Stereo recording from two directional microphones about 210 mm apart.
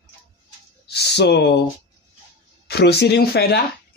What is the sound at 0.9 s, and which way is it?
Speech, 50° left (ahead or behind).